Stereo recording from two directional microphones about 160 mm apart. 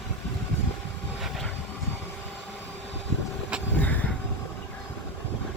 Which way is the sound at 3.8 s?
10° left (ahead or behind).